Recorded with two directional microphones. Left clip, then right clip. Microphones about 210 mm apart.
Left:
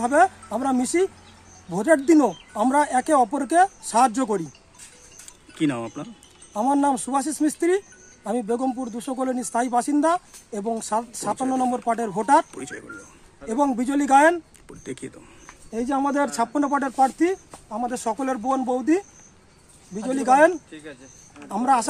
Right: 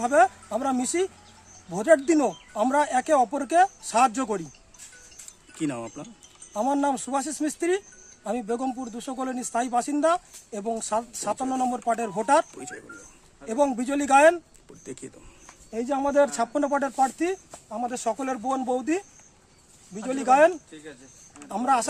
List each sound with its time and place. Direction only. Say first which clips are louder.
0.0 s speech: left 2 dB; 15° right (ahead or behind)
5.6 s speech: left 6 dB; centre (ahead or behind); by 12.4 s 15° right (ahead or behind)
12.5 s speech: left 4 dB; centre (ahead or behind)
13.5 s speech: left 1 dB; 15° right (ahead or behind)
14.7 s speech: left 5 dB; centre (ahead or behind)
15.7 s speech: even; 20° right (ahead or behind)